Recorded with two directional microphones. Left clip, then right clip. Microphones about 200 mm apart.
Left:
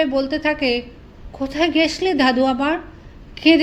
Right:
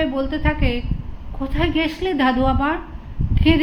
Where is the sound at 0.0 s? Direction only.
35° left (ahead or behind).